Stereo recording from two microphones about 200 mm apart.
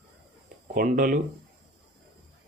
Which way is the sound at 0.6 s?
40° right (ahead or behind).